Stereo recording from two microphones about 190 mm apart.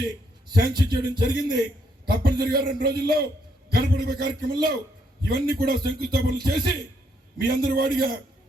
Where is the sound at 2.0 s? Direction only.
55° right (ahead or behind).